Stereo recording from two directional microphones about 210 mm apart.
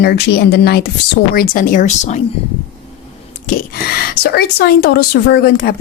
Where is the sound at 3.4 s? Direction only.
40° left (ahead or behind).